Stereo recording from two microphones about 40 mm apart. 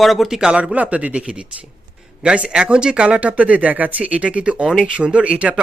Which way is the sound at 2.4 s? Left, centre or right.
Right.